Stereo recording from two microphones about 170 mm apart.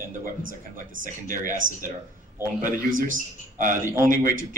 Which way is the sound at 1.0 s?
50° right (ahead or behind).